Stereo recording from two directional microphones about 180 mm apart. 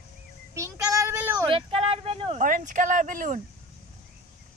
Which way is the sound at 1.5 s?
30° right (ahead or behind).